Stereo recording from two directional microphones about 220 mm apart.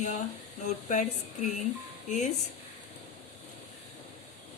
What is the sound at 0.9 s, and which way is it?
Speech, 35° left (ahead or behind).